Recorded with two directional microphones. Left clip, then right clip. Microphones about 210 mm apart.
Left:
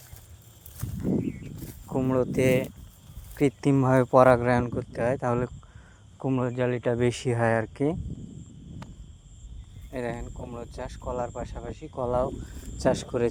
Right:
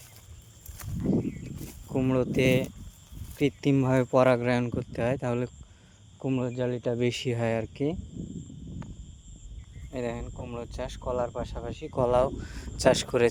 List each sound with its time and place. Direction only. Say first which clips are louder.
1.9 s speech: left 1 dB; 10° right (ahead or behind)
9.9 s speech: left 1 dB; 10° right (ahead or behind)
10.5 s speech: right 3 dB; 25° right (ahead or behind)
11.9 s speech: right 3 dB; 55° right (ahead or behind)